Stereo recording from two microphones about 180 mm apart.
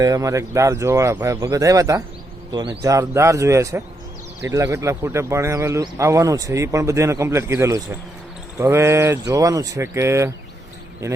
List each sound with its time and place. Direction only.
0.0 s speech: 20° right (ahead or behind)